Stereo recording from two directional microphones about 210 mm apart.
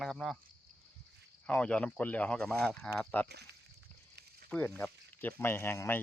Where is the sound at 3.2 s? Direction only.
50° right (ahead or behind).